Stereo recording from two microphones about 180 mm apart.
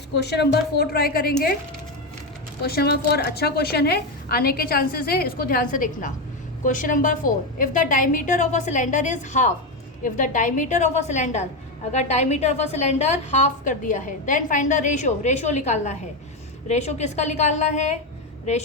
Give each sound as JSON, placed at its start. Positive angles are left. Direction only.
{"t": 0.2, "sound": "a woman's voice", "side_deg": 65}
{"t": 2.6, "sound": "a woman's voice", "side_deg": 60}